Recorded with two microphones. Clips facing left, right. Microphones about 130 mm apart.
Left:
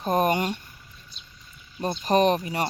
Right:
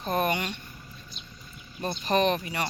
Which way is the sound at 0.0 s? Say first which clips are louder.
Left 4 dB; 40° left (ahead or behind).